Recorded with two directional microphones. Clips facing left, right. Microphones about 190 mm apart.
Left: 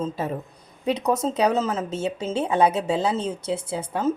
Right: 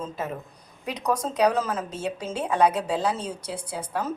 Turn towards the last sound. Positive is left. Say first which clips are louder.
# left 3 dB
turn(degrees=25)  # may be behind; listen again after turning